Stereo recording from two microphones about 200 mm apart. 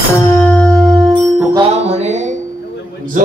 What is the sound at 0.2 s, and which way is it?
Music, 10° left (ahead or behind).